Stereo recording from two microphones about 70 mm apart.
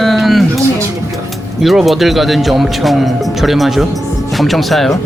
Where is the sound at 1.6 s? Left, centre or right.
Centre.